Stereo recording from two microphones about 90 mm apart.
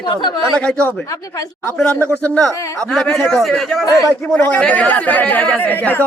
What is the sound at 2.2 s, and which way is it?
A man's voice, 15° left (ahead or behind).